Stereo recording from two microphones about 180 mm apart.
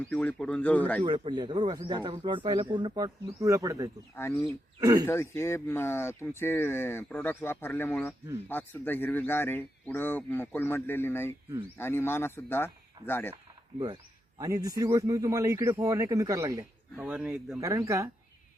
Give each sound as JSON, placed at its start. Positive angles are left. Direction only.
{"t": 0.1, "sound": "speech", "side_deg": 5}
{"t": 1.0, "sound": "speech", "side_deg": -25}
{"t": 4.1, "sound": "speech", "side_deg": 15}
{"t": 4.8, "sound": "speech", "side_deg": -20}
{"t": 5.0, "sound": "speech", "side_deg": 15}
{"t": 13.3, "sound": "a sound", "side_deg": -25}
{"t": 14.3, "sound": "a man's voice", "side_deg": -20}
{"t": 17.0, "sound": "speech", "side_deg": -5}
{"t": 17.6, "sound": "a man's voice", "side_deg": -15}